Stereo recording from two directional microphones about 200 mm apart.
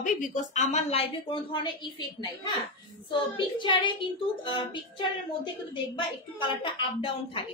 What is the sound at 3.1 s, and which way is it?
Speech, 25° left (ahead or behind).